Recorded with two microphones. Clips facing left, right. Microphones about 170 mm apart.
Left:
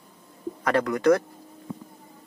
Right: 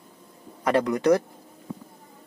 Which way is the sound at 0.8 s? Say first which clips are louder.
Left 1 dB; 20° right (ahead or behind).